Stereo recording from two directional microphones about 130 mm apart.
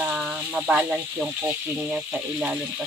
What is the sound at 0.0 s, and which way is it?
Speech, 5° right (ahead or behind).